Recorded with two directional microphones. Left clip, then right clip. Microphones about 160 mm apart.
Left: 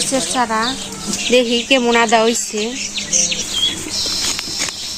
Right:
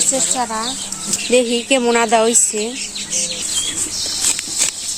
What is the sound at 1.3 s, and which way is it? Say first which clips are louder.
Speech: left 1 dB; 55° right (ahead or behind).